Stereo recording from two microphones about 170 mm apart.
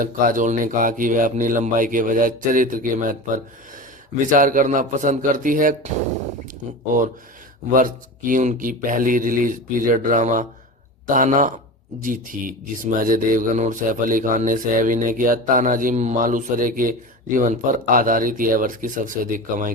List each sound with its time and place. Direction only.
0.0 s speech: 50° right (ahead or behind)
7.8 s speech: 55° right (ahead or behind)